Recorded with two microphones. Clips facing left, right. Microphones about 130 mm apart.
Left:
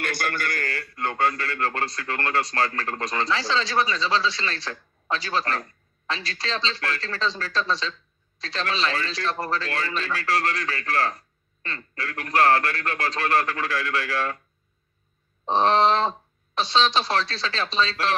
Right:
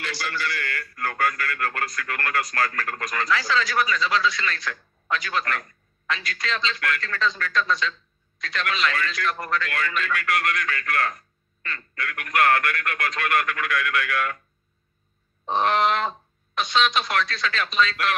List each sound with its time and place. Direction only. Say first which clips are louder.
0.0 s a man's voice: left 2 dB; 50° left (ahead or behind)
0.7 s a man's voice: left 1 dB; 25° left (ahead or behind)
15.4 s a man's voice: left 2 dB; 30° left (ahead or behind)